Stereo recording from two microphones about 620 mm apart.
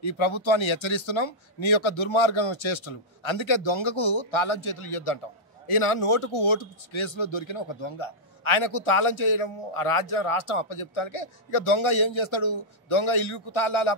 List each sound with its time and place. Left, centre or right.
0.0 s speech: left